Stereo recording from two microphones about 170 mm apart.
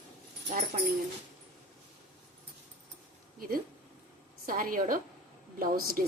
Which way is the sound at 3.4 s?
60° right (ahead or behind).